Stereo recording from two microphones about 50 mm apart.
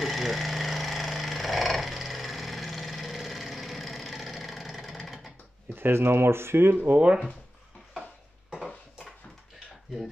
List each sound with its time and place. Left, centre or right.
0.0 s a sound: centre
5.8 s speech: right
6.7 s speech: right